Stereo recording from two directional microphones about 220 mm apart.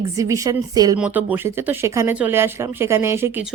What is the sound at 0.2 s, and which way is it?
A woman's voice, 15° right (ahead or behind).